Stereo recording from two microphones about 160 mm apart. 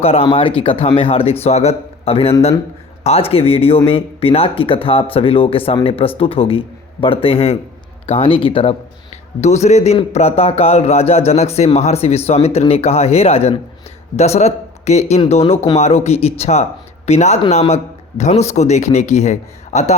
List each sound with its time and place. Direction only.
0.0 s a man's voice: 35° left (ahead or behind)